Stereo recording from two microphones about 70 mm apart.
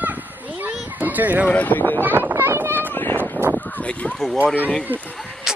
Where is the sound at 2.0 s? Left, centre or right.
Right.